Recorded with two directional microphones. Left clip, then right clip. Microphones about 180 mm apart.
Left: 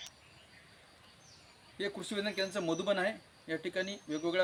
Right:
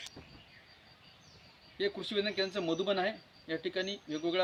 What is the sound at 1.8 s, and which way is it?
Speech, 20° left (ahead or behind).